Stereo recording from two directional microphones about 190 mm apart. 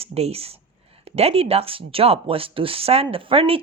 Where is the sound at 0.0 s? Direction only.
30° right (ahead or behind).